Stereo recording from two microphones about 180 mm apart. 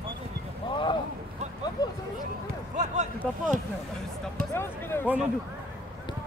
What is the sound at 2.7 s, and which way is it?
Speech, 40° right (ahead or behind).